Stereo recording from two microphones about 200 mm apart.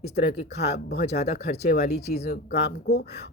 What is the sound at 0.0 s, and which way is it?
Speech, 35° left (ahead or behind).